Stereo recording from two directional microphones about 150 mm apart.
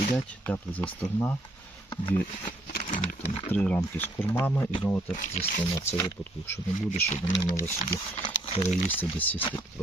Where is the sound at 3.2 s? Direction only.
40° left (ahead or behind).